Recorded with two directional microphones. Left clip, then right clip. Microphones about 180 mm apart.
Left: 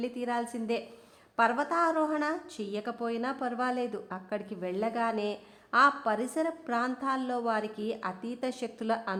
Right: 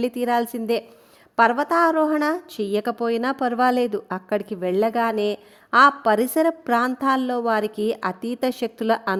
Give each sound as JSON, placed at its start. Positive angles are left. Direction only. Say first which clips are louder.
{"t": 0.0, "sound": "speech", "louder": "right 11 dB", "side_deg": -55}